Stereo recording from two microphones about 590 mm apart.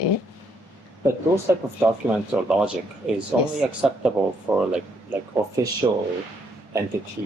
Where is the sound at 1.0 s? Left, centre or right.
Centre.